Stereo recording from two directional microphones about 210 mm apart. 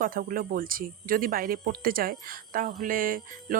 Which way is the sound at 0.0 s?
40° right (ahead or behind).